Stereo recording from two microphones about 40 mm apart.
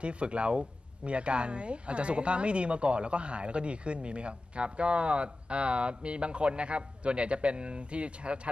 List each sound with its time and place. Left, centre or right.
0.0 s speech: right